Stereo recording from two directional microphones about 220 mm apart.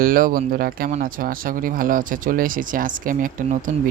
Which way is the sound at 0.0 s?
40° right (ahead or behind).